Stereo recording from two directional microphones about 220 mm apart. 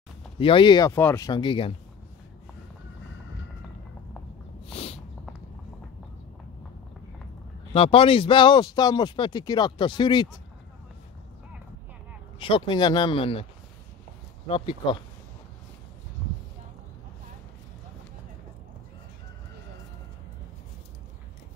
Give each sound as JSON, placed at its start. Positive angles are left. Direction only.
{"t": 0.4, "sound": "speech", "side_deg": 25}
{"t": 4.6, "sound": "a sound", "side_deg": 25}
{"t": 7.7, "sound": "speech", "side_deg": 25}
{"t": 12.4, "sound": "speech", "side_deg": 25}
{"t": 14.5, "sound": "speech", "side_deg": 25}